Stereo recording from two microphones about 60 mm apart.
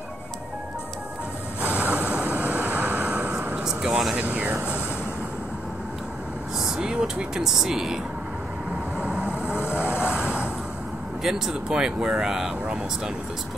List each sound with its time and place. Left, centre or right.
1.6 s vehicle: right
3.6 s speech: centre
4.2 s speech: right
6.6 s speech: centre
8.9 s vehicle: centre
9.6 s vehicle: left
10.1 s vehicle: centre
11.2 s speech: centre